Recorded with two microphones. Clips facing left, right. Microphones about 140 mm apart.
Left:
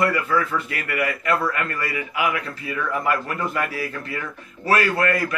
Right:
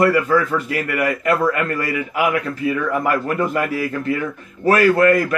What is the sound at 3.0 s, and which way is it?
Speech, 50° right (ahead or behind).